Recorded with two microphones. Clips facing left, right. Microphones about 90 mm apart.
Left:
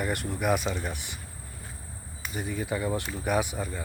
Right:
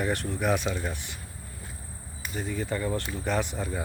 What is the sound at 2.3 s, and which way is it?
Speech, 10° left (ahead or behind).